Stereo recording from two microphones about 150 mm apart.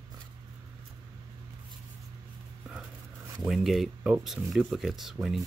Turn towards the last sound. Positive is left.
turn(degrees=0)  # may be behind; listen again after turning